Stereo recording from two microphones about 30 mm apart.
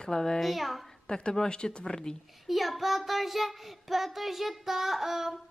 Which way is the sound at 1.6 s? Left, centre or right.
Left.